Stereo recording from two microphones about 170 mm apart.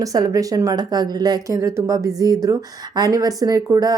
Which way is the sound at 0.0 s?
20° right (ahead or behind).